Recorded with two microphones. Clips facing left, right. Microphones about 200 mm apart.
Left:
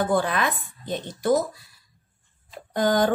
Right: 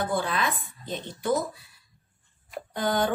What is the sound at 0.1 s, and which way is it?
Speech, 50° left (ahead or behind).